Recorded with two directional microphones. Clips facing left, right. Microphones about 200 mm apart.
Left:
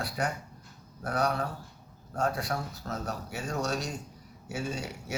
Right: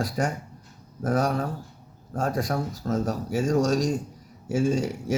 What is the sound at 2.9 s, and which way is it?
Speech, 45° right (ahead or behind).